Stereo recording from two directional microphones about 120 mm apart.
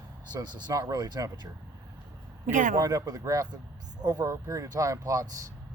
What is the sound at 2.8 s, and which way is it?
Speech, 30° right (ahead or behind).